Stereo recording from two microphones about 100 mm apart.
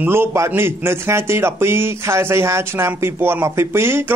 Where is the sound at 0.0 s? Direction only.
25° right (ahead or behind).